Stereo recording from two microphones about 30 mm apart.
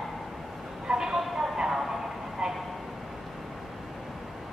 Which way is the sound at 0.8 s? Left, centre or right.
Right.